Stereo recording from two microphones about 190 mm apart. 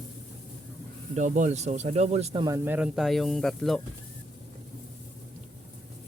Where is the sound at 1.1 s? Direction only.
40° right (ahead or behind).